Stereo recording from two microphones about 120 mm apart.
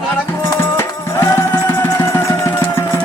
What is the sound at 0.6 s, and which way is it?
Music, 20° left (ahead or behind).